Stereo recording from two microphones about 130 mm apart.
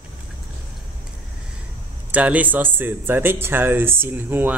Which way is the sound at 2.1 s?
10° right (ahead or behind).